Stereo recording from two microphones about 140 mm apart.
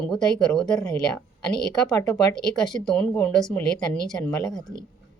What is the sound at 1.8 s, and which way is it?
Speech, 5° left (ahead or behind).